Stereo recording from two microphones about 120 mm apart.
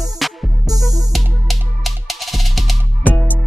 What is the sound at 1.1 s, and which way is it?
Music, centre (ahead or behind).